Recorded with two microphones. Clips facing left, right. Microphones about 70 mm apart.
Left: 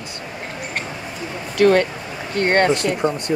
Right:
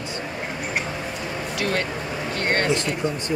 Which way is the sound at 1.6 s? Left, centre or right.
Left.